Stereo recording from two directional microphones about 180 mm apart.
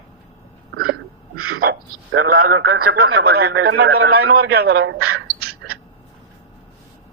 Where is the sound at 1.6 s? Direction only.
60° right (ahead or behind).